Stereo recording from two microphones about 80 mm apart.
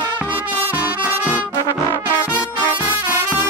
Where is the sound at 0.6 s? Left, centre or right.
Centre.